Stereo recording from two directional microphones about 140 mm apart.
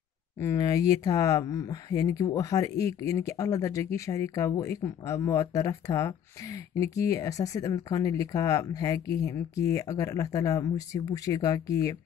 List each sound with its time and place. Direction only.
0.4 s speech: 25° left (ahead or behind)